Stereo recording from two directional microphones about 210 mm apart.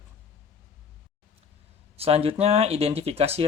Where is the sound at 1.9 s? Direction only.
30° right (ahead or behind).